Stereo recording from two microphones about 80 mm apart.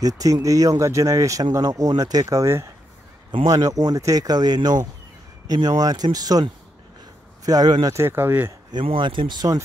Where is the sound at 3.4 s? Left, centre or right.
Right.